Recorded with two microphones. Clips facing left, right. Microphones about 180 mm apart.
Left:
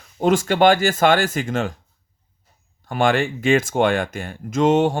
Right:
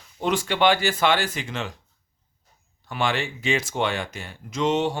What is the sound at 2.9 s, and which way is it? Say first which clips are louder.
Speech: left 7 dB; 50° left (ahead or behind).